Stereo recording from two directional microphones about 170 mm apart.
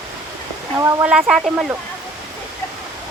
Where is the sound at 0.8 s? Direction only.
15° right (ahead or behind).